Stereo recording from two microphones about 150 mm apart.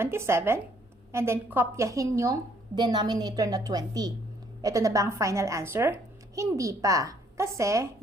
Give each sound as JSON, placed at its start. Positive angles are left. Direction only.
{"t": 0.0, "sound": "a woman's voice", "side_deg": -15}